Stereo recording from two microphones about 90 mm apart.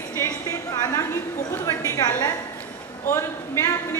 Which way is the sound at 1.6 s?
35° left (ahead or behind).